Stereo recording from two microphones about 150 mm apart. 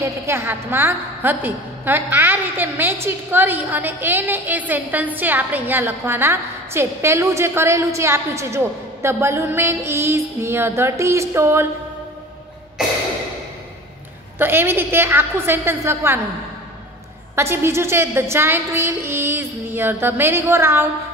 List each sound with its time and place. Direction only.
0.0 s a woman's voice: 15° right (ahead or behind)
14.4 s a woman's voice: 15° right (ahead or behind)
17.4 s a woman's voice: 15° right (ahead or behind)